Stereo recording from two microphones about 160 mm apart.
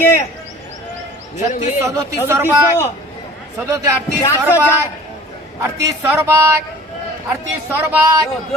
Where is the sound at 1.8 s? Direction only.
20° right (ahead or behind).